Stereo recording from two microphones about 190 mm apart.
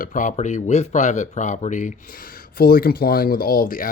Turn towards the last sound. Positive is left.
turn(degrees=45)  # may be behind; listen again after turning